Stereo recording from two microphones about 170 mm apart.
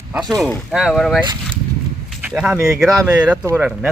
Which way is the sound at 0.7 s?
Centre (ahead or behind).